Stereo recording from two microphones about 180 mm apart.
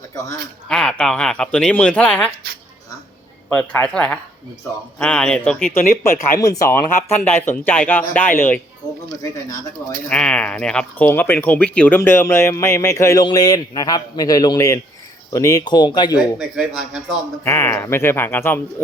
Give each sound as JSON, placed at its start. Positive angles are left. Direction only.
{"t": 0.1, "sound": "speech", "side_deg": 15}
{"t": 0.7, "sound": "speech", "side_deg": 5}
{"t": 3.5, "sound": "speech", "side_deg": 10}
{"t": 10.1, "sound": "speech", "side_deg": 5}
{"t": 16.4, "sound": "speech", "side_deg": 0}
{"t": 17.4, "sound": "speech", "side_deg": 15}